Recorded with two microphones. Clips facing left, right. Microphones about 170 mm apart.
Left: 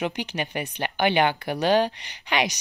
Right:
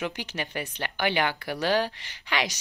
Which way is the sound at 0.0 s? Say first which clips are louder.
Left 4 dB; 15° left (ahead or behind).